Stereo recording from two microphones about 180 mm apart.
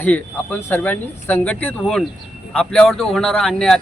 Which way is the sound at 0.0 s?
10° left (ahead or behind).